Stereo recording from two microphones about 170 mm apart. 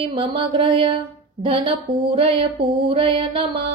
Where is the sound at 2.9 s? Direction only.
30° right (ahead or behind).